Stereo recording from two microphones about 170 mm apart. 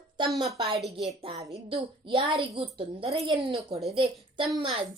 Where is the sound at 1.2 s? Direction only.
35° right (ahead or behind).